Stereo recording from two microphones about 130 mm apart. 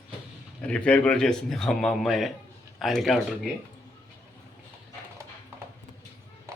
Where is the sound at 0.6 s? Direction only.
10° left (ahead or behind).